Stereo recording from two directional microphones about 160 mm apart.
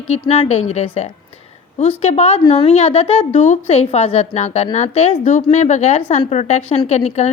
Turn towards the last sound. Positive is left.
turn(degrees=45)  # may be behind; listen again after turning